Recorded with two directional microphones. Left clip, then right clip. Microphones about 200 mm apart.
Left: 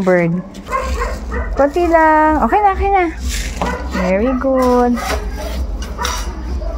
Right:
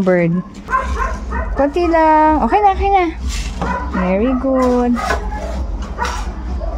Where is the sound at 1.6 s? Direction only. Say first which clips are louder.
Left 2 dB; 10° right (ahead or behind).